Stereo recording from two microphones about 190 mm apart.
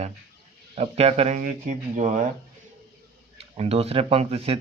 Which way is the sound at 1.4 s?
45° right (ahead or behind).